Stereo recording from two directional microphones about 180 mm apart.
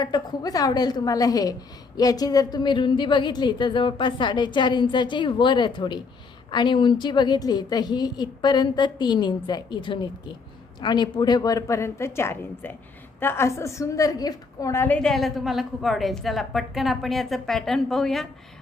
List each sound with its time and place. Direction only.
0.0 s a woman's voice: 20° left (ahead or behind); by 18.3 s centre (ahead or behind)